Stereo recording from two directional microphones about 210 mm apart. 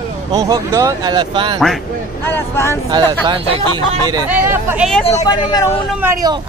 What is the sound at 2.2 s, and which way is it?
Speech, 10° left (ahead or behind).